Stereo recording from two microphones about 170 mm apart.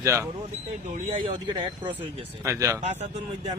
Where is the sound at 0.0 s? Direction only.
15° right (ahead or behind).